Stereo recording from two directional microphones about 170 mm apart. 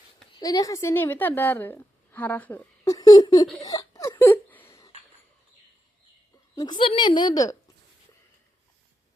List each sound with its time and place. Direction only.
0.3 s a woman's voice: 20° left (ahead or behind)
3.6 s a sound: 20° left (ahead or behind)
6.6 s a woman's voice: 25° left (ahead or behind)